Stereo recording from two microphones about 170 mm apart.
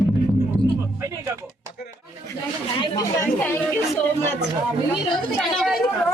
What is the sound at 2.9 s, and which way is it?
Speech, 15° left (ahead or behind).